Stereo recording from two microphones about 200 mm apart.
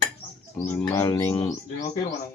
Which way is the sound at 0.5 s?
15° left (ahead or behind).